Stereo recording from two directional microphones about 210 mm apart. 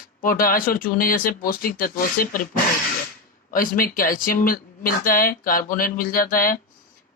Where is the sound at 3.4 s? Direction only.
40° left (ahead or behind).